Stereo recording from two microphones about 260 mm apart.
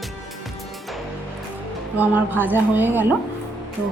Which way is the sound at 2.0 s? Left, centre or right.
Centre.